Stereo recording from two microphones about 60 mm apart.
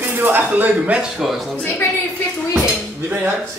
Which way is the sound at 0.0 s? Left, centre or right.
Right.